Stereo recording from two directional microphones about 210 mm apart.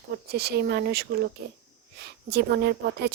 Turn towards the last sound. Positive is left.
turn(degrees=-55)  # may be behind; listen again after turning